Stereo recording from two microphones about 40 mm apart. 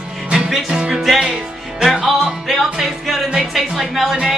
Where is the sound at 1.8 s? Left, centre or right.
Centre.